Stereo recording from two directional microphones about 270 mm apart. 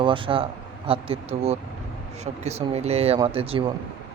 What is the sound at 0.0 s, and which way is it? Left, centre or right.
A man's voice, centre.